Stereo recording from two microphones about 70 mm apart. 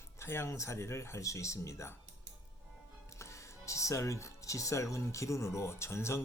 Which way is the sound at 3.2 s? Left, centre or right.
Left.